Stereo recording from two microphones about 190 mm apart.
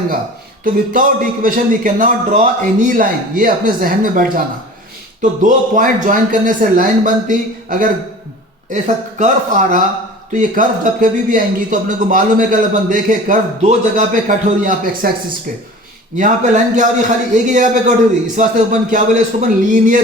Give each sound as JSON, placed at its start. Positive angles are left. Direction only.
{"t": 0.6, "sound": "a man's voice", "side_deg": -45}
{"t": 5.4, "sound": "a man's voice", "side_deg": -40}
{"t": 16.1, "sound": "a man's voice", "side_deg": -40}